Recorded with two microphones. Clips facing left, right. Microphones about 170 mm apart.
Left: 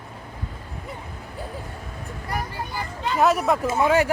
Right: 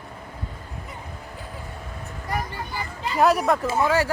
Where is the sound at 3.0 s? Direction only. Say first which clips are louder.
Even; centre (ahead or behind).